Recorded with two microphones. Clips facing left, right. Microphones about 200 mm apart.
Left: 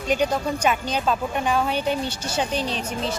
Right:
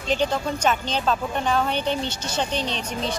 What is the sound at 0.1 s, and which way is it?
Speech, 10° left (ahead or behind).